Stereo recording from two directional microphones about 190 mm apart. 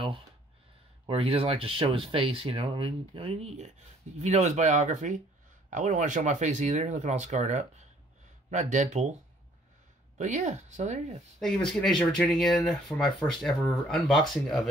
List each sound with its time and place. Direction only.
1.0 s speech: 30° right (ahead or behind)
10.1 s speech: 40° right (ahead or behind)
11.3 s speech: 5° left (ahead or behind)